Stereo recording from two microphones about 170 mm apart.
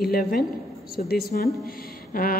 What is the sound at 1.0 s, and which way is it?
Speech, 50° left (ahead or behind).